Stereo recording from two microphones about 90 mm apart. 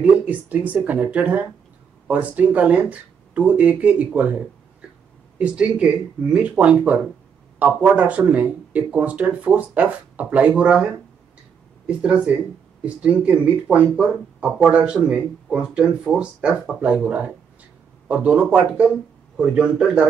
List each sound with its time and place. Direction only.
0.3 s speech: 15° right (ahead or behind)